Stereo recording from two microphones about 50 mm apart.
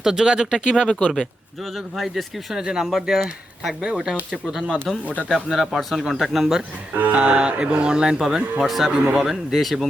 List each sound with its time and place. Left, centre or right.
0.0 s speech: centre
1.7 s speech: centre
2.8 s speech: centre
3.2 s speech: centre
6.9 s music: right
7.2 s speech: right
8.6 s speech: centre